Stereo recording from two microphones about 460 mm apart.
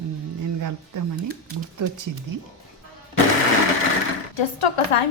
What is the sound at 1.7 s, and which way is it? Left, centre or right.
Speech, right.